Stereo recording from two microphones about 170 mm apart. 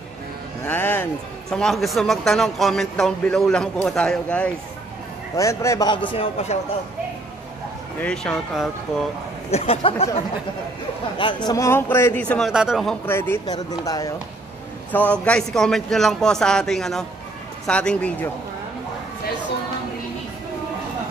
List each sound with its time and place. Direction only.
0.7 s music: 10° left (ahead or behind)
1.5 s speech: centre (ahead or behind)
5.3 s a man's voice: 15° left (ahead or behind)
6.0 s a man's voice: 35° left (ahead or behind)
8.0 s speech: 5° left (ahead or behind)
9.5 s a man's voice: 35° left (ahead or behind)
11.1 s a man's voice: 25° left (ahead or behind); by 12.9 s centre (ahead or behind)
13.0 s a man's voice: 15° left (ahead or behind)
14.9 s a man's voice: 10° left (ahead or behind)